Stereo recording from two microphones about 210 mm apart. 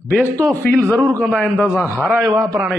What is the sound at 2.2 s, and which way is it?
Speech, 15° right (ahead or behind).